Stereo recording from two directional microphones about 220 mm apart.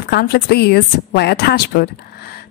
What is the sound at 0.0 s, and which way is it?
A woman's voice, 45° left (ahead or behind).